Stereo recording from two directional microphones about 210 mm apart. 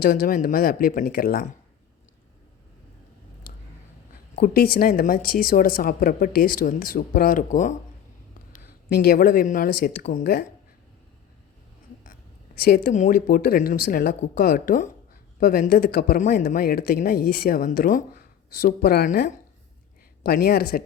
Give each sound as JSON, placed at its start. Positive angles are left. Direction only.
{"t": 0.0, "sound": "speech", "side_deg": 45}
{"t": 4.4, "sound": "speech", "side_deg": 45}
{"t": 8.9, "sound": "speech", "side_deg": 45}
{"t": 12.5, "sound": "speech", "side_deg": 45}